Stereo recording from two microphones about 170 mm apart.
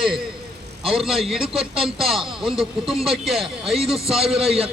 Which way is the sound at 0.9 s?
Centre (ahead or behind).